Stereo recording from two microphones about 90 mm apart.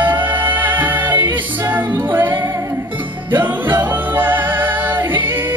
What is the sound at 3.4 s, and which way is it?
Music, 20° right (ahead or behind).